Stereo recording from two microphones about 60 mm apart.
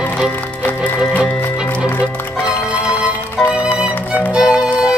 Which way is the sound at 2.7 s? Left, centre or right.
Right.